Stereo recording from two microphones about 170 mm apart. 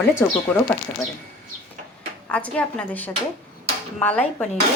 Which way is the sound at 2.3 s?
10° left (ahead or behind).